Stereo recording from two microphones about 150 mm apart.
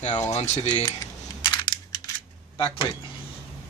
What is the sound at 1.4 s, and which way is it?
Crushing, 30° left (ahead or behind).